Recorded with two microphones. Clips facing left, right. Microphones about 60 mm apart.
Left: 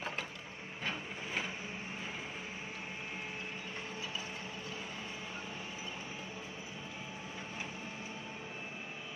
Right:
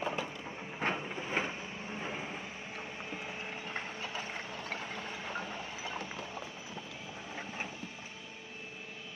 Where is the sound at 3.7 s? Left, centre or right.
Right.